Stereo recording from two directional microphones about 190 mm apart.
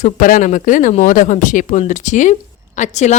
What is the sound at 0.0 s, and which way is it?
Speech, 45° left (ahead or behind).